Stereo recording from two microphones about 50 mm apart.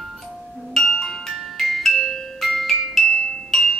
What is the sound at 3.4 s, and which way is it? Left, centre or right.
Music, centre.